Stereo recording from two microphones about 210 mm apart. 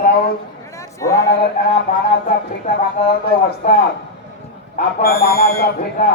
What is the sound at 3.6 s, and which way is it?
Speech, 35° left (ahead or behind).